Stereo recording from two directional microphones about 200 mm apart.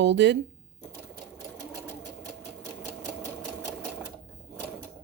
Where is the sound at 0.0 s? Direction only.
60° right (ahead or behind).